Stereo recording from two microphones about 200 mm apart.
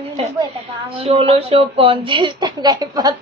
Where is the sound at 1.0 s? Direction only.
30° right (ahead or behind).